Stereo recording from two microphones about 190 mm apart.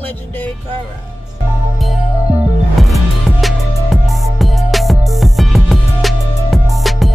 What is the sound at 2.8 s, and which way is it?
Music, centre (ahead or behind).